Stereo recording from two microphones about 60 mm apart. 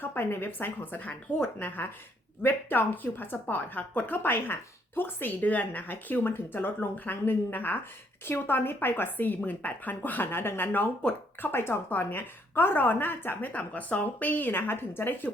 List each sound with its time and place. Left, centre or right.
0.0 s speech: left